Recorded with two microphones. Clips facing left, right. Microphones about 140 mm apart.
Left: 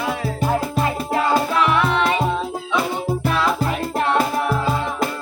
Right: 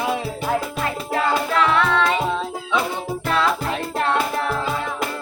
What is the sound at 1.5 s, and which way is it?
Music, 15° left (ahead or behind).